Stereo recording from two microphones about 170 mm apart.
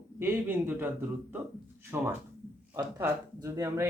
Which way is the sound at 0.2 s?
15° right (ahead or behind).